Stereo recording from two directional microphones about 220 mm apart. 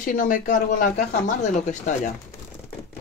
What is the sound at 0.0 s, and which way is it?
Speech, 40° left (ahead or behind).